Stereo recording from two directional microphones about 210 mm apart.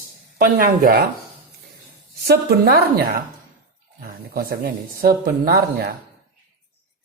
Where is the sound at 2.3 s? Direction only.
50° right (ahead or behind).